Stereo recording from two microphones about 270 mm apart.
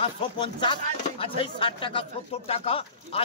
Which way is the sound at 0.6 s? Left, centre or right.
Centre.